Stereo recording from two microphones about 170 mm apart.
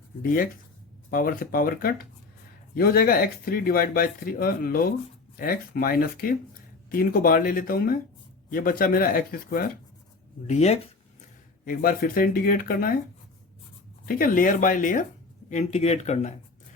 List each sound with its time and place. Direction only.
1.1 s speech: 55° left (ahead or behind)
10.4 s speech: 40° left (ahead or behind)
11.6 s speech: 55° left (ahead or behind)
14.0 s speech: 55° left (ahead or behind)